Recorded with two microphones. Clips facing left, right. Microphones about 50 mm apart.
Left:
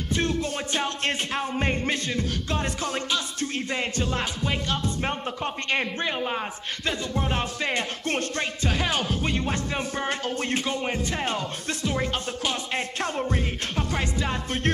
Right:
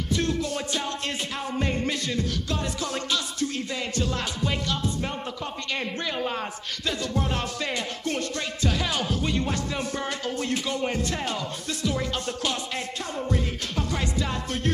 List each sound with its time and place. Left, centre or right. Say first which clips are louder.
0.1 s music: even; left
2.8 s a man's voice: left 1 dB; centre
7.7 s music: left 2 dB; left
8.6 s music: even; centre
9.5 s a man's voice: left 1 dB; left
10.7 s a man's voice: even; centre
14.2 s a man's voice: left 1 dB; left